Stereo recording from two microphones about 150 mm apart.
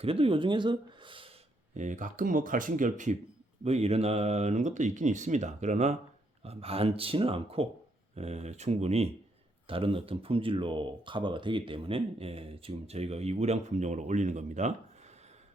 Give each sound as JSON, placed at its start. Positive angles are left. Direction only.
{"t": 0.0, "sound": "speech", "side_deg": -40}
{"t": 1.7, "sound": "speech", "side_deg": -55}
{"t": 3.6, "sound": "speech", "side_deg": -45}